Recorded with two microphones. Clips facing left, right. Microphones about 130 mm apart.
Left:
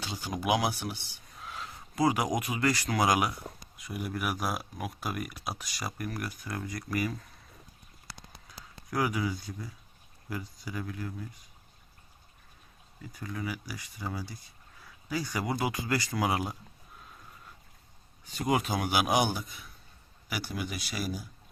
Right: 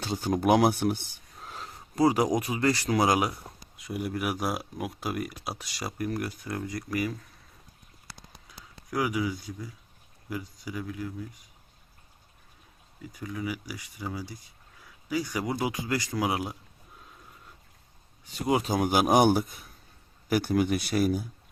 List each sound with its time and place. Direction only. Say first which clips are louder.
0.0 s speech: right 8 dB; 50° right (ahead or behind)
1.4 s a sound: even; 35° right (ahead or behind)
2.4 s speech: right 3 dB; 30° right (ahead or behind)
8.9 s speech: right 2 dB; 10° right (ahead or behind)
13.1 s speech: right 3 dB; 15° right (ahead or behind)
18.4 s speech: right 2 dB; 20° right (ahead or behind)
18.7 s speech: right 5 dB; 45° right (ahead or behind)